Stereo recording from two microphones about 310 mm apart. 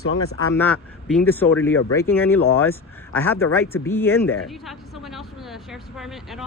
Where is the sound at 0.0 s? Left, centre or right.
Left.